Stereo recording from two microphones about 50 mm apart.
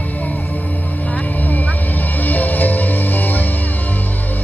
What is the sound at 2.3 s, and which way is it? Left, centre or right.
Music, left.